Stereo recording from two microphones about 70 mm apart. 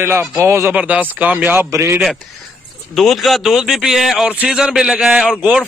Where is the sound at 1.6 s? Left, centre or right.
Right.